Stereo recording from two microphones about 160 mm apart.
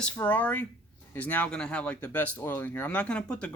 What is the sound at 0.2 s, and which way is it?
Speech, 10° left (ahead or behind).